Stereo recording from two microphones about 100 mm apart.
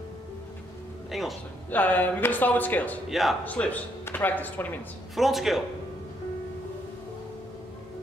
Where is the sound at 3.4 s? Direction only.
15° left (ahead or behind).